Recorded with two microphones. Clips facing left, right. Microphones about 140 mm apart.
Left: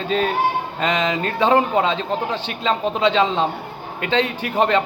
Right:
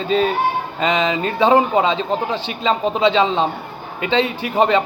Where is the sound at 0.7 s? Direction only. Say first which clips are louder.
Right 5 dB; centre (ahead or behind).